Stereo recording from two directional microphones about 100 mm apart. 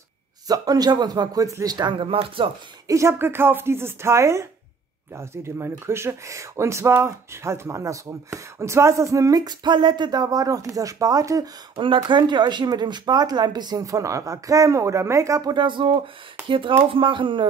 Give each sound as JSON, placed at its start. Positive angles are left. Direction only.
{"t": 0.5, "sound": "speech", "side_deg": -40}
{"t": 2.9, "sound": "speech", "side_deg": -30}
{"t": 11.7, "sound": "speech", "side_deg": -55}
{"t": 15.5, "sound": "speech", "side_deg": -50}